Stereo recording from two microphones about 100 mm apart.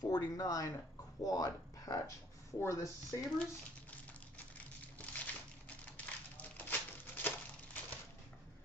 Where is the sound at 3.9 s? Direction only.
15° left (ahead or behind).